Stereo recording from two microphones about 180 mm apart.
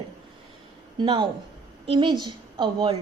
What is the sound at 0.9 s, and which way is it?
A woman's voice, 25° right (ahead or behind).